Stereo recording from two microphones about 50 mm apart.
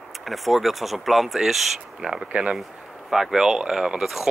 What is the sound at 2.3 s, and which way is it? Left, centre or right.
Speech, right.